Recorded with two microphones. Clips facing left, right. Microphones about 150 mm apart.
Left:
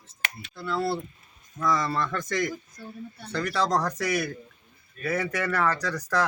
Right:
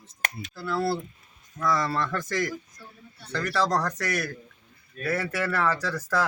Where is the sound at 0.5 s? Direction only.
Centre (ahead or behind).